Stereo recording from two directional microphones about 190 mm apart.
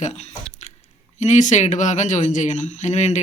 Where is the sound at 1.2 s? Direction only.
40° left (ahead or behind).